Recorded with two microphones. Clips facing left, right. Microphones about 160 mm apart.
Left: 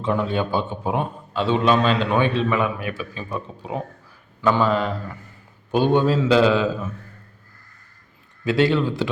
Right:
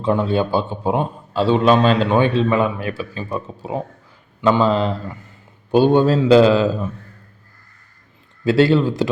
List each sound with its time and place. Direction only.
0.0 s a man's voice: 30° right (ahead or behind)
4.4 s a man's voice: 20° right (ahead or behind); by 6.6 s 35° right (ahead or behind)
8.4 s a man's voice: 35° right (ahead or behind)